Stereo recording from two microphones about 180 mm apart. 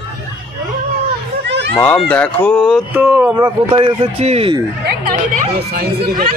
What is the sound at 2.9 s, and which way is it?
Speech, 5° right (ahead or behind).